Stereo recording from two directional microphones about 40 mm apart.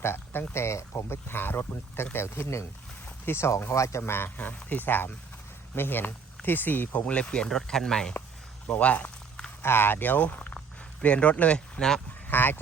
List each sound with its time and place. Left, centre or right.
0.0 s speech: left
4.4 s speech: left
7.0 s speech: left
7.4 s speech: centre
8.6 s speech: left
9.6 s speech: left
11.0 s speech: left
12.3 s speech: left